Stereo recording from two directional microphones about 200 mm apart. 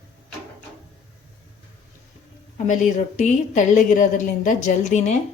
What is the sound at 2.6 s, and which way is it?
A woman's voice, 35° left (ahead or behind).